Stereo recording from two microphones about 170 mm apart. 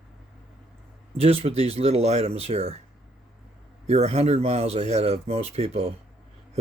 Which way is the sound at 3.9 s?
40° right (ahead or behind).